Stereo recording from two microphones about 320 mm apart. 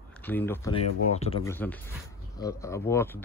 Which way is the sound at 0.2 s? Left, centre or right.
Centre.